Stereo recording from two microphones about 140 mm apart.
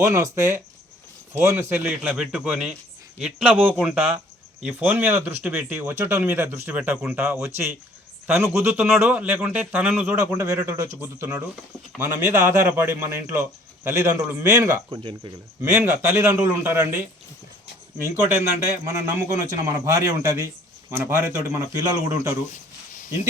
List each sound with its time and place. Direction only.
0.0 s speech: 20° right (ahead or behind)
18.9 s speech: 20° right (ahead or behind)